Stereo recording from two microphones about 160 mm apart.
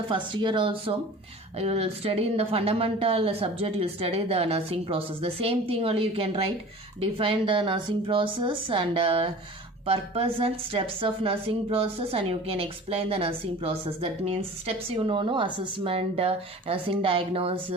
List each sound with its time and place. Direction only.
0.1 s a woman's voice: 30° right (ahead or behind)